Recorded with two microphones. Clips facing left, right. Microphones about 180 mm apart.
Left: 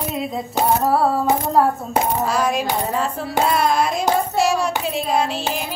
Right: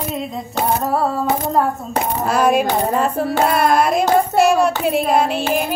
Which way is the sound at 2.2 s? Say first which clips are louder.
Right 5 dB; 55° right (ahead or behind).